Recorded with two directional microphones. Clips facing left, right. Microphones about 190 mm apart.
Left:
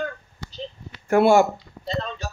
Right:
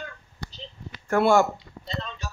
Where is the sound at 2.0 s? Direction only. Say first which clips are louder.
Left 4 dB; 40° left (ahead or behind).